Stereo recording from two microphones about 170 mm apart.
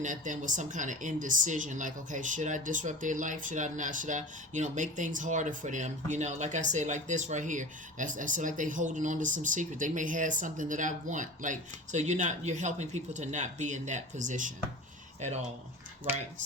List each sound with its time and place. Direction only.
0.0 s speech: 50° right (ahead or behind)